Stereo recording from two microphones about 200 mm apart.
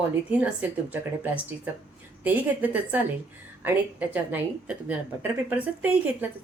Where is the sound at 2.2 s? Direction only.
10° right (ahead or behind).